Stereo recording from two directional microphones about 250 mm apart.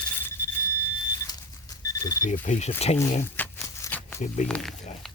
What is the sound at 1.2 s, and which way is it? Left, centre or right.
Alarm clock, centre.